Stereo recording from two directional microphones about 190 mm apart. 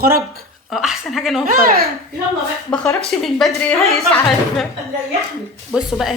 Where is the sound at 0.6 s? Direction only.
Centre (ahead or behind).